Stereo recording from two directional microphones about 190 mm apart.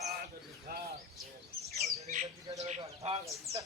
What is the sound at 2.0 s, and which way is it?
Bird, 35° right (ahead or behind).